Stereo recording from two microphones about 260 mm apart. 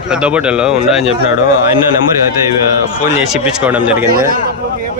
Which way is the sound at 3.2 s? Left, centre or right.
Centre.